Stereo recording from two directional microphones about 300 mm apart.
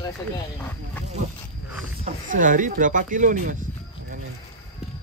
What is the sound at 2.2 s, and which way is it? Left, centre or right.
Speech, right.